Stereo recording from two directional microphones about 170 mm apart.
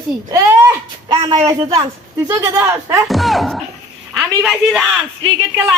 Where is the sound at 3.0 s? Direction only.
Centre (ahead or behind).